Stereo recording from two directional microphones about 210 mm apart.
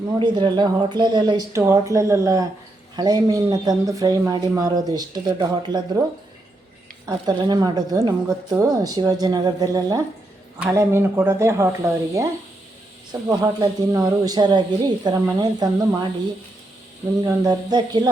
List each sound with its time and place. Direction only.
0.2 s speech: 20° right (ahead or behind)
7.0 s speech: 20° right (ahead or behind)
17.2 s speech: 20° right (ahead or behind)